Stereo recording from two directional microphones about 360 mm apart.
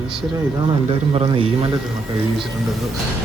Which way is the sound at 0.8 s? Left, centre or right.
Centre.